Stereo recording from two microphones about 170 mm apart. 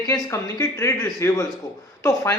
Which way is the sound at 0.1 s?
15° left (ahead or behind).